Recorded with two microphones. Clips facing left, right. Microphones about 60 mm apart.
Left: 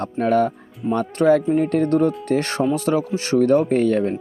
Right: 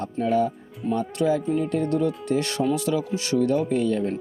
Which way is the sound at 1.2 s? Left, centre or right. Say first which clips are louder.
Left 8 dB; left.